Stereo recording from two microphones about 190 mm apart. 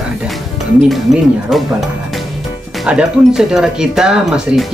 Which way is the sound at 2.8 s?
5° right (ahead or behind).